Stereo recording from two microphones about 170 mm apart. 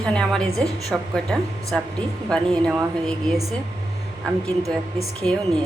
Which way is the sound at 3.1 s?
Centre (ahead or behind).